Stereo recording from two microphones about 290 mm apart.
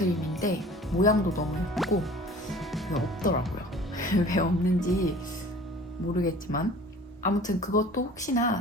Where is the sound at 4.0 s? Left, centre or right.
Left.